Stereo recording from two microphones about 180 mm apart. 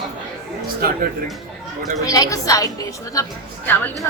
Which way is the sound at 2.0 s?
20° left (ahead or behind).